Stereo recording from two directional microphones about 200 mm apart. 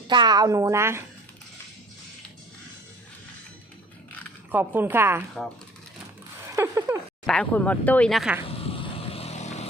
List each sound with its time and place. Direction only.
0.1 s a woman's voice: 20° right (ahead or behind)
4.5 s a woman's voice: 10° right (ahead or behind)
6.6 s a woman's voice: 15° right (ahead or behind)
7.3 s speech: 5° left (ahead or behind)
8.4 s vehicle: 30° left (ahead or behind)